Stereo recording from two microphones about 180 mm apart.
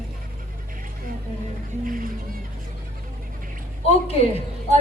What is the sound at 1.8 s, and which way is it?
Speech, 50° right (ahead or behind).